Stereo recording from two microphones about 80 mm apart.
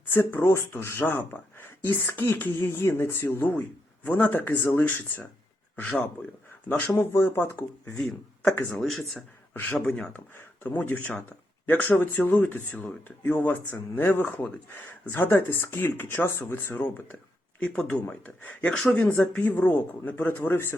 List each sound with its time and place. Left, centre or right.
0.1 s speech: left
7.9 s speech: centre
9.5 s a man's voice: left
9.9 s speech: centre
18.1 s speech: centre